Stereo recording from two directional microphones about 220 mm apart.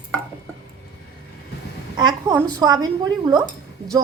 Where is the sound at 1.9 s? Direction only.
20° right (ahead or behind).